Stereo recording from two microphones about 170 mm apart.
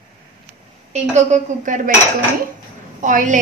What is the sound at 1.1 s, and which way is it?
Speech, 45° right (ahead or behind).